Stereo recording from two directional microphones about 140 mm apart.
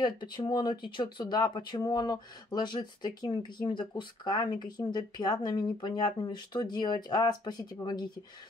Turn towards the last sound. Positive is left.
turn(degrees=30)  # may be behind; listen again after turning